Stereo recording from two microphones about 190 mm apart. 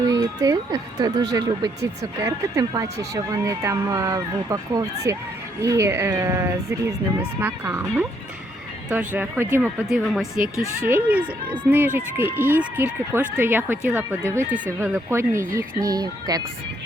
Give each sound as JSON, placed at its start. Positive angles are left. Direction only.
{"t": 0.1, "sound": "speech", "side_deg": -20}